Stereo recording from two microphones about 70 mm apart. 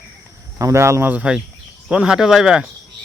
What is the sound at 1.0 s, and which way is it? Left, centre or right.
Speech, right.